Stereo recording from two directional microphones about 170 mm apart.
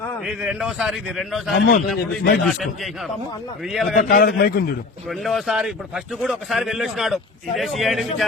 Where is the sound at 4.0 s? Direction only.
55° left (ahead or behind).